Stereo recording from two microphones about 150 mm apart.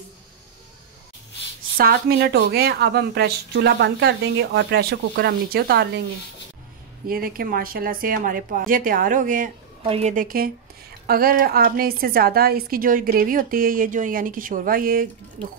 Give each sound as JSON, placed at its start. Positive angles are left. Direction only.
{"t": 1.8, "sound": "a woman's voice", "side_deg": -90}
{"t": 7.1, "sound": "a woman's voice", "side_deg": -80}
{"t": 9.8, "sound": "a woman's voice", "side_deg": -40}
{"t": 10.1, "sound": "a woman's voice", "side_deg": -75}